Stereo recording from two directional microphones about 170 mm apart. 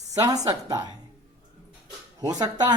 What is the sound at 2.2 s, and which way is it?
Speech, 20° right (ahead or behind).